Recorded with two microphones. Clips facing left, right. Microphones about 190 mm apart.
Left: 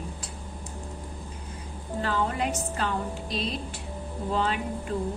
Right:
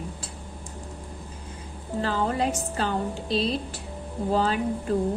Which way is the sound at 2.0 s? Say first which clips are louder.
Right 2 dB; 35° right (ahead or behind).